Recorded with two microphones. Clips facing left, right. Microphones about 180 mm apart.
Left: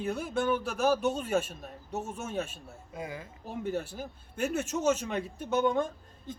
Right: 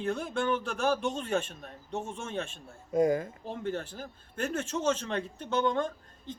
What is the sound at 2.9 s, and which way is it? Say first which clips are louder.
Speech: right 14 dB; 45° right (ahead or behind).